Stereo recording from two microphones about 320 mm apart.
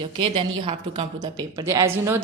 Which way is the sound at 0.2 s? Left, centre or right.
Centre.